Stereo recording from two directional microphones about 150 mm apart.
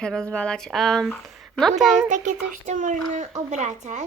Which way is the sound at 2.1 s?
55° right (ahead or behind).